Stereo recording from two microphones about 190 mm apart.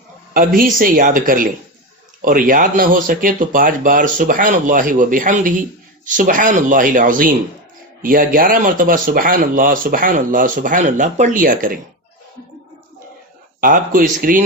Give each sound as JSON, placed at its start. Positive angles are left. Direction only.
{"t": 0.3, "sound": "speech", "side_deg": -50}
{"t": 13.6, "sound": "speech", "side_deg": -45}